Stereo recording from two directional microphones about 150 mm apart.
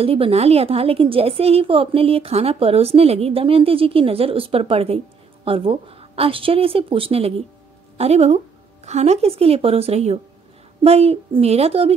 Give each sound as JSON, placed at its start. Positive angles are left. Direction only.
{"t": 0.0, "sound": "a woman's voice", "side_deg": -40}